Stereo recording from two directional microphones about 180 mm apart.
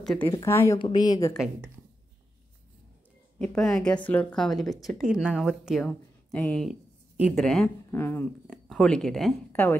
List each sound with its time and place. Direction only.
0.0 s speech: 5° left (ahead or behind)
0.3 s a woman's voice: 15° left (ahead or behind)
3.3 s a woman's voice: 5° left (ahead or behind)